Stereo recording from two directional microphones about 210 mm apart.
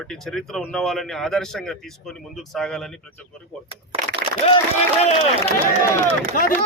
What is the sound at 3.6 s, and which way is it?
Speech, 25° right (ahead or behind).